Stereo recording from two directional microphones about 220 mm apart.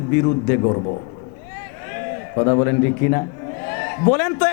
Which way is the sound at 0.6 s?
30° left (ahead or behind).